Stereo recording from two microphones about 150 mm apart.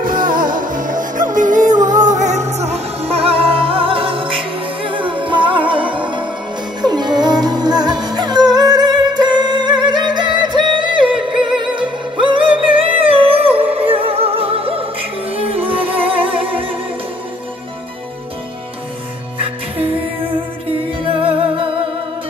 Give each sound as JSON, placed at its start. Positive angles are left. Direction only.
{"t": 0.0, "sound": "music", "side_deg": -65}
{"t": 11.3, "sound": "music", "side_deg": -5}
{"t": 11.7, "sound": "music", "side_deg": -35}
{"t": 21.1, "sound": "music", "side_deg": -35}